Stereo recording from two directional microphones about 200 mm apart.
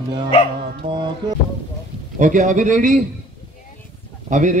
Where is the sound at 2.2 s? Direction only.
40° right (ahead or behind).